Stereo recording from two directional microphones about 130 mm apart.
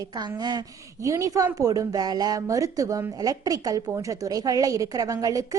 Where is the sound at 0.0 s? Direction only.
35° right (ahead or behind).